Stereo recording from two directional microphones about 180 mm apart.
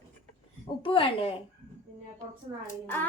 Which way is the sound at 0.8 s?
30° left (ahead or behind).